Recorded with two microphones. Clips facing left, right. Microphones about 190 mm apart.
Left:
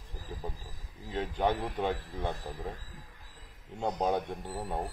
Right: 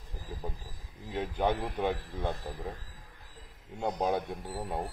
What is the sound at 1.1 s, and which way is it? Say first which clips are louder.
Speech: even; 15° right (ahead or behind).